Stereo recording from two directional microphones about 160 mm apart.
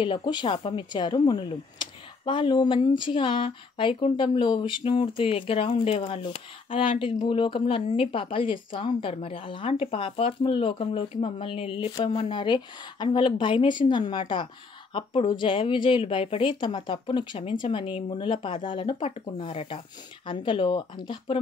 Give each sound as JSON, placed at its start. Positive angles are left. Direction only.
{"t": 0.0, "sound": "speech", "side_deg": 30}